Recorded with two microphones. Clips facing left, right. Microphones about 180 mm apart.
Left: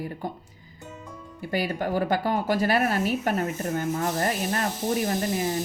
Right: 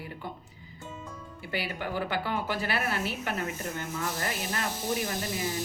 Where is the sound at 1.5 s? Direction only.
45° left (ahead or behind).